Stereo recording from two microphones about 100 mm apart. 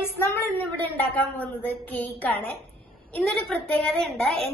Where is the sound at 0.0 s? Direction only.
25° left (ahead or behind).